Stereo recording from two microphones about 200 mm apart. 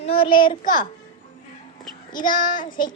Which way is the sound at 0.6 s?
40° left (ahead or behind).